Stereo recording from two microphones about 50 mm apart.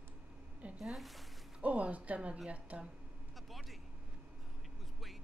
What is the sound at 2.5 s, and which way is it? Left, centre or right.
Speech, right.